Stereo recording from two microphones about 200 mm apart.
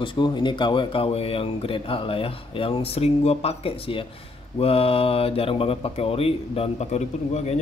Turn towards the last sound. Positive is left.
turn(degrees=35)  # may be behind; listen again after turning